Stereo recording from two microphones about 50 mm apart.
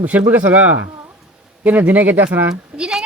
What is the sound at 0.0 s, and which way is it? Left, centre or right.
Speech, right.